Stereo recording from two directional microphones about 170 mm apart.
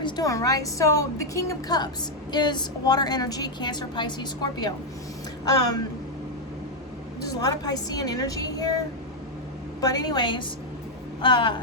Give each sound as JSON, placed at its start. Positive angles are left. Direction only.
{"t": 0.0, "sound": "a woman's voice", "side_deg": 20}
{"t": 7.2, "sound": "a woman's voice", "side_deg": 20}
{"t": 9.8, "sound": "a woman's voice", "side_deg": 25}